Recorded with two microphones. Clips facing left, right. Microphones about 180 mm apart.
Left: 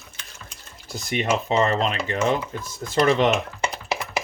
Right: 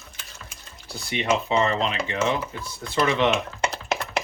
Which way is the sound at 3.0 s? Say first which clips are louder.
Left 3 dB; 40° left (ahead or behind).